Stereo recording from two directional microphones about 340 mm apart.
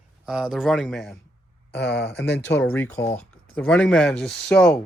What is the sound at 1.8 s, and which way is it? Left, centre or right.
Speech, left.